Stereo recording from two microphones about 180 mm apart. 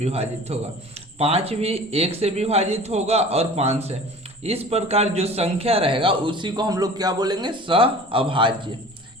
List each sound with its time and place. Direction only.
0.0 s a man's voice: 35° right (ahead or behind)